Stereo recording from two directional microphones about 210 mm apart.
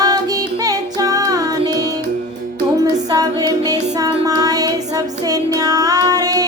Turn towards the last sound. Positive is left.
turn(degrees=-15)  # may be behind; listen again after turning